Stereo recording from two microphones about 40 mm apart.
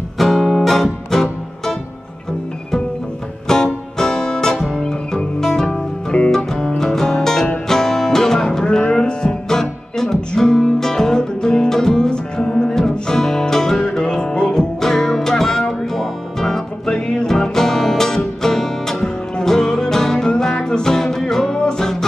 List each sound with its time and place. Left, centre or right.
0.2 s music: centre
3.5 s music: centre